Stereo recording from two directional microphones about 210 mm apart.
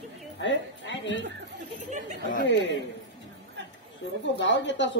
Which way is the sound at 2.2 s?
60° left (ahead or behind).